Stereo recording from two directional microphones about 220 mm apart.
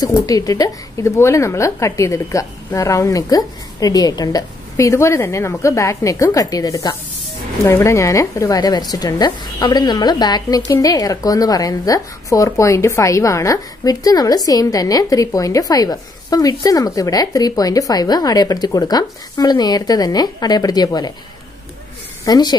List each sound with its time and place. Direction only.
0.0 s speech: 15° left (ahead or behind)
22.2 s speech: 20° left (ahead or behind)